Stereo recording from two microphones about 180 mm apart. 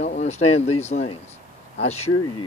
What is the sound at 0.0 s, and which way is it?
Speech, 40° left (ahead or behind).